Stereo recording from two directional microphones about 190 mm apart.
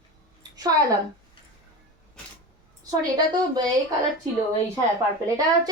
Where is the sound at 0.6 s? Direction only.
20° right (ahead or behind).